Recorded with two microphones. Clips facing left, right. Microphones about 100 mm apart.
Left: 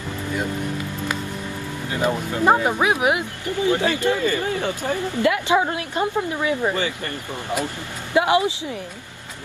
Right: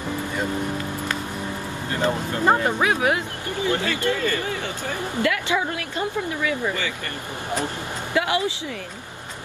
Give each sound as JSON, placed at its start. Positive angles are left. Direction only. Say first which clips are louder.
{"t": 2.0, "sound": "speech", "louder": "left 2 dB", "side_deg": 15}
{"t": 8.1, "sound": "speech", "louder": "left 5 dB", "side_deg": 20}